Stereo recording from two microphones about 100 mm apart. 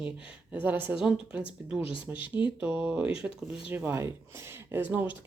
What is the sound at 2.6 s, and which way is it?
Speech, 15° right (ahead or behind).